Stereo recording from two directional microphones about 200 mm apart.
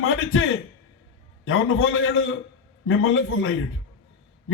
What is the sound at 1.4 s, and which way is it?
A man's voice, 90° left.